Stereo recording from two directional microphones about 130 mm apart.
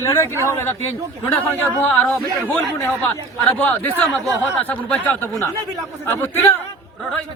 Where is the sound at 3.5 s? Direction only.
15° left (ahead or behind).